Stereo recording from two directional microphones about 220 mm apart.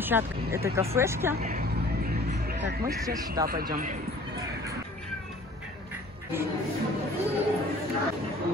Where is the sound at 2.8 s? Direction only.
15° right (ahead or behind).